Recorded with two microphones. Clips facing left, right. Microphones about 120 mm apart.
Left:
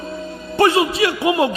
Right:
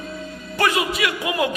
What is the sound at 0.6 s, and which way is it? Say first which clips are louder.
Speech: left 6 dB; 30° left (ahead or behind).